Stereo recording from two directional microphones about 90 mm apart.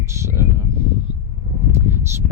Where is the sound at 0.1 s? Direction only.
30° right (ahead or behind).